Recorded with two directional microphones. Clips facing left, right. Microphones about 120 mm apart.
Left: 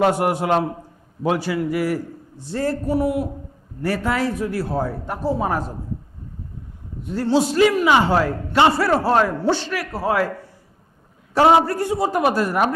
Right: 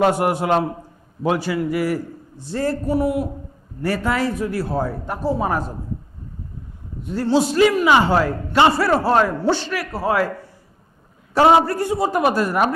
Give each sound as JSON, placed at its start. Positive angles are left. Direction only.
{"t": 0.0, "sound": "a man's voice", "side_deg": -20}
{"t": 7.1, "sound": "a man's voice", "side_deg": -25}